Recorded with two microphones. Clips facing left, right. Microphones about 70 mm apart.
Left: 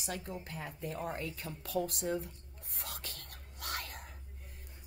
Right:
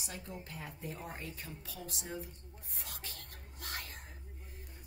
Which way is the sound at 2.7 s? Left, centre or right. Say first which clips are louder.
Left 3 dB; left.